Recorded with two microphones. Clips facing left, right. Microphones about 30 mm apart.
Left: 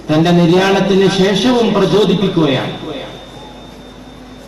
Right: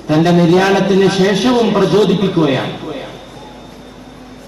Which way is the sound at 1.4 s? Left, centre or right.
Centre.